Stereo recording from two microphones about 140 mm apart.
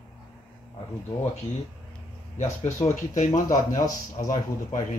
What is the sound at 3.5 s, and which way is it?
Speech, 65° left (ahead or behind).